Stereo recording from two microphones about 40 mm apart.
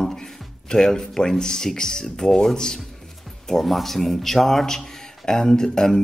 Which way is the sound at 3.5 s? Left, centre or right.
Centre.